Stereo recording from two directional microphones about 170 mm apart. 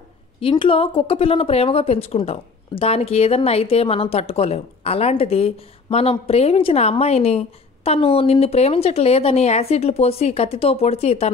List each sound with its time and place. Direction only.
0.4 s speech: 30° left (ahead or behind)